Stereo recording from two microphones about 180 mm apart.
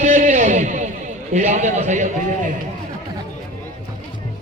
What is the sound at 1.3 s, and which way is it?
Speech, 40° right (ahead or behind).